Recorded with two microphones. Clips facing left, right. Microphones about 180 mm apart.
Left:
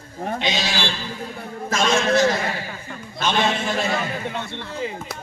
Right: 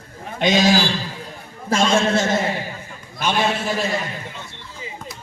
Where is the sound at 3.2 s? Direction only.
10° right (ahead or behind).